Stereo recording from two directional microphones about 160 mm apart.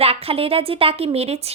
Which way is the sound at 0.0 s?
40° right (ahead or behind).